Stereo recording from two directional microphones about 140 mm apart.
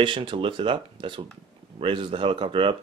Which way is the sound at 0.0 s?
35° right (ahead or behind).